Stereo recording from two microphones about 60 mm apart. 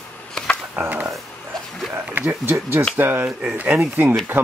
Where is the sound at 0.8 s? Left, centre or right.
Right.